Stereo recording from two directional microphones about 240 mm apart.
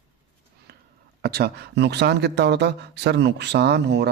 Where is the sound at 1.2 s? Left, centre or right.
Right.